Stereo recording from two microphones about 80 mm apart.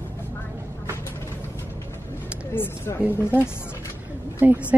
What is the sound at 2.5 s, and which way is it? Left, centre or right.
Speech, left.